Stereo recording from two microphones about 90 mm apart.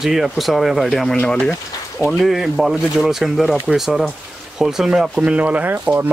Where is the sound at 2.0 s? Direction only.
Centre (ahead or behind).